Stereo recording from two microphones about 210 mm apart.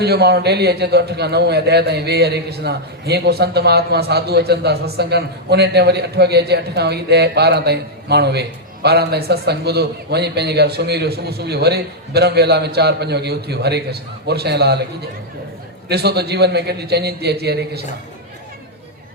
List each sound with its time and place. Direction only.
0.0 s a man's voice: 50° right (ahead or behind)
15.9 s a man's voice: 50° right (ahead or behind)